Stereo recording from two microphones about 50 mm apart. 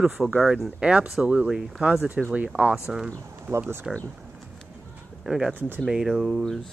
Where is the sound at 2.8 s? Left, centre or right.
Centre.